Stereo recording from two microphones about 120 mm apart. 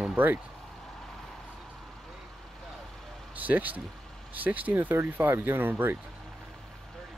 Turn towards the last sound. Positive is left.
turn(degrees=-15)  # may be behind; listen again after turning